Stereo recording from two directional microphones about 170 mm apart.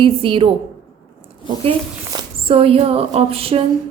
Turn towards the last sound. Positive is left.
turn(degrees=-35)  # may be behind; listen again after turning